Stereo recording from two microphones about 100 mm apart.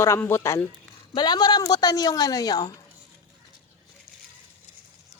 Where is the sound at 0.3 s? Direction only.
30° left (ahead or behind).